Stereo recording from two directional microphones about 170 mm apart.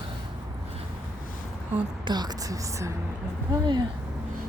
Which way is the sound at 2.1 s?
25° right (ahead or behind).